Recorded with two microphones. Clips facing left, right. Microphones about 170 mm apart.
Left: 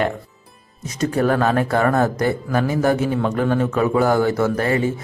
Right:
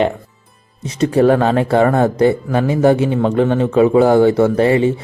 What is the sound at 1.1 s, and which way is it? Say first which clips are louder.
A man's voice: right 6 dB; 30° right (ahead or behind).